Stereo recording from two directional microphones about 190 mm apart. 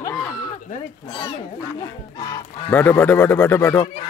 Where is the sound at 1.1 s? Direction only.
25° left (ahead or behind).